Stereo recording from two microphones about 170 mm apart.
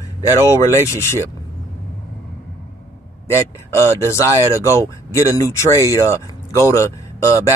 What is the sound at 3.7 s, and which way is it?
Speech, 15° left (ahead or behind).